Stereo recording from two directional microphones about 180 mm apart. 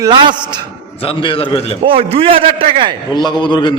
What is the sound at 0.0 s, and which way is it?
Speech, 25° right (ahead or behind).